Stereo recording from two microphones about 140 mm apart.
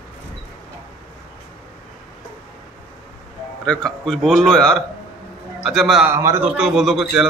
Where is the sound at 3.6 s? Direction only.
5° left (ahead or behind).